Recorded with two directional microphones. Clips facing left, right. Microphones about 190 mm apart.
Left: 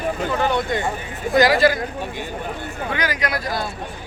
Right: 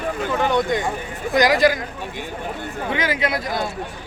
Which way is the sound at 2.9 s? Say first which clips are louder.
Right 2 dB; 25° right (ahead or behind).